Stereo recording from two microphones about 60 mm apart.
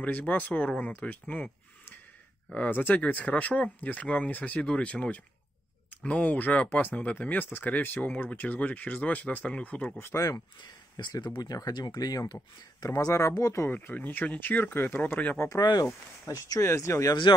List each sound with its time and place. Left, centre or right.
0.0 s speech: left
2.7 s speech: left
9.9 s speech: left
11.4 s speech: left
13.1 s speech: left
13.7 s speech: left
15.4 s speech: left
16.6 s speech: left